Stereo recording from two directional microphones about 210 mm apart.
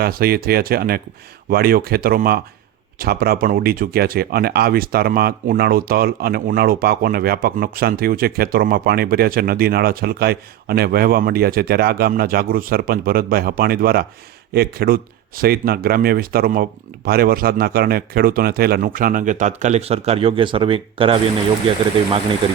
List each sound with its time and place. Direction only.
0.0 s speech: 45° right (ahead or behind); by 21.2 s 25° right (ahead or behind)